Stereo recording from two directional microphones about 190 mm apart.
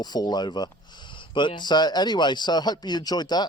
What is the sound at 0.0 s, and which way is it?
Speech, 20° left (ahead or behind).